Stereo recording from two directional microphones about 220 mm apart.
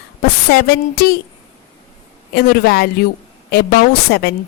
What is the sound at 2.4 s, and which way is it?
A woman's voice, 45° left (ahead or behind).